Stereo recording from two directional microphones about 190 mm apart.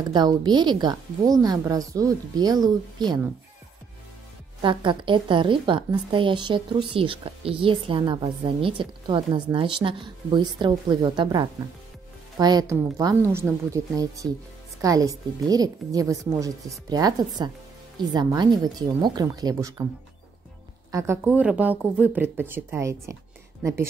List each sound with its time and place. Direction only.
0.1 s a woman's voice: 20° right (ahead or behind)
4.6 s a woman's voice: 25° right (ahead or behind)
20.9 s speech: 10° right (ahead or behind)